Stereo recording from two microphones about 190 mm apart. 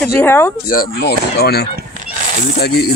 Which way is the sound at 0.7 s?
55° left (ahead or behind).